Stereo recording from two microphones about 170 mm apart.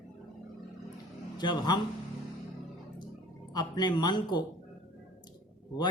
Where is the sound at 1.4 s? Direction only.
25° left (ahead or behind).